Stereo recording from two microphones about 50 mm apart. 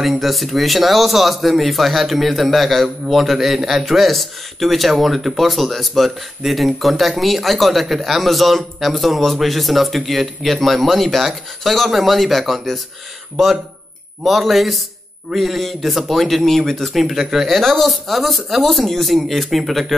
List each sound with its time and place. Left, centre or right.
0.0 s speech: centre
14.2 s speech: centre